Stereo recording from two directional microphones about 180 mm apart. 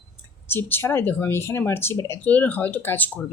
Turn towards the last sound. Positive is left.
turn(degrees=10)  # may be behind; listen again after turning